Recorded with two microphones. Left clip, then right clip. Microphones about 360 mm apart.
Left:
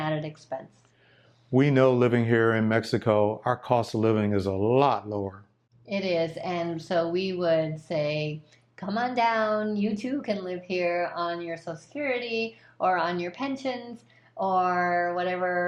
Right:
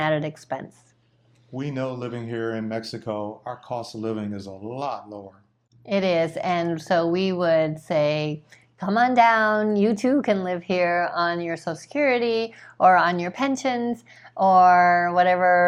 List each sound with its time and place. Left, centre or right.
0.0 s speech: right
1.5 s speech: left
5.8 s a woman's voice: right